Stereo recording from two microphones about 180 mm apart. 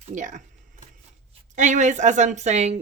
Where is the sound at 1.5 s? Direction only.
40° right (ahead or behind).